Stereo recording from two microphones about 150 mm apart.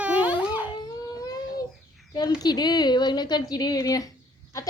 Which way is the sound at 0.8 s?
25° left (ahead or behind).